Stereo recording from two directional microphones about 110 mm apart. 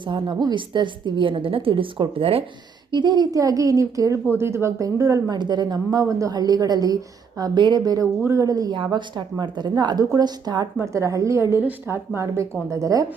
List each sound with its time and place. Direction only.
0.0 s a woman's voice: 45° right (ahead or behind)
2.9 s a woman's voice: 40° right (ahead or behind)
5.4 s a woman's voice: 40° right (ahead or behind)
8.2 s a woman's voice: 25° right (ahead or behind)
10.8 s a woman's voice: 25° right (ahead or behind)